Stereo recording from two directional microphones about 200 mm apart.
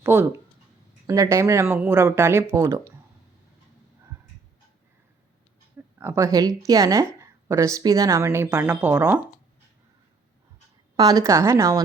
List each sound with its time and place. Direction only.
0.0 s a woman's voice: 10° right (ahead or behind)
6.0 s a woman's voice: 15° right (ahead or behind)
10.9 s a woman's voice: 20° right (ahead or behind)